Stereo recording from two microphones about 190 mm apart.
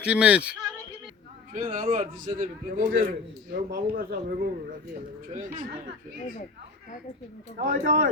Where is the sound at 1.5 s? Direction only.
45° right (ahead or behind).